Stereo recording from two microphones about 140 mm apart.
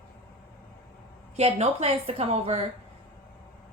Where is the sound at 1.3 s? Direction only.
50° right (ahead or behind).